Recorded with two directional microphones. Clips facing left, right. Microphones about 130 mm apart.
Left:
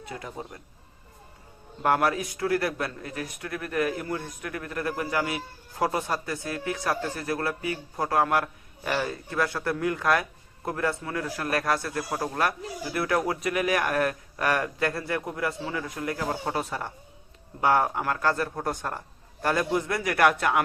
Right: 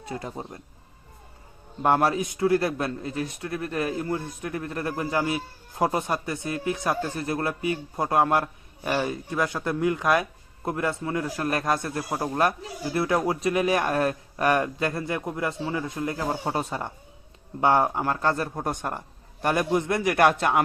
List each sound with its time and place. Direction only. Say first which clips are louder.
0.0 s speech: right 3 dB; 30° right (ahead or behind)
1.8 s a man's voice: right 2 dB; 25° right (ahead or behind)